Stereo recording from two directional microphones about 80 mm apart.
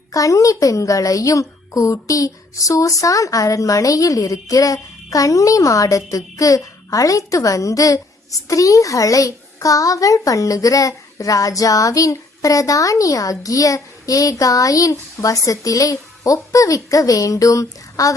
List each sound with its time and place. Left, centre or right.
0.1 s a child's voice: left